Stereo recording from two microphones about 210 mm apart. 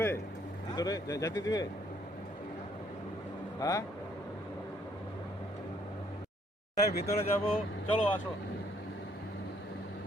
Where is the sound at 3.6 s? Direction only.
15° left (ahead or behind).